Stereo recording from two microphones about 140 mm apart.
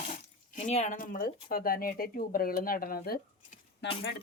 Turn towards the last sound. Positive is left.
turn(degrees=90)